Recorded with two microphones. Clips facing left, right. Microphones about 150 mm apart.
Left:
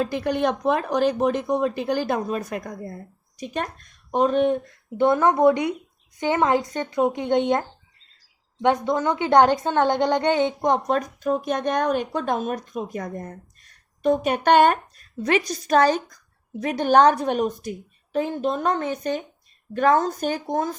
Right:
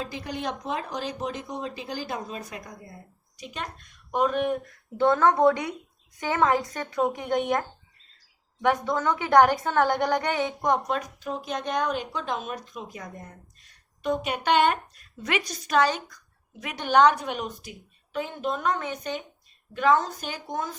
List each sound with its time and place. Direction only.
0.0 s a woman's voice: 60° left (ahead or behind); by 10.8 s 25° left (ahead or behind)
10.8 s a woman's voice: 40° left (ahead or behind)